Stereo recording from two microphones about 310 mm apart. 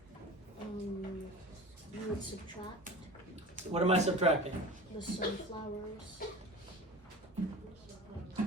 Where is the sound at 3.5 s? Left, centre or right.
Right.